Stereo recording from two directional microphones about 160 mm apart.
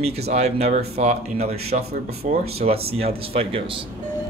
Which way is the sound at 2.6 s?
55° right (ahead or behind).